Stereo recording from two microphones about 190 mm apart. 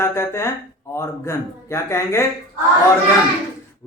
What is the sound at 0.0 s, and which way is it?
Speech, 15° left (ahead or behind).